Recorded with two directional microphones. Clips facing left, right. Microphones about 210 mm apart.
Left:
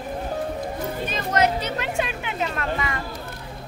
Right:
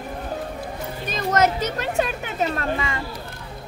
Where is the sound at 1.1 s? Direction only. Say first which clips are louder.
Right 3 dB; 45° right (ahead or behind).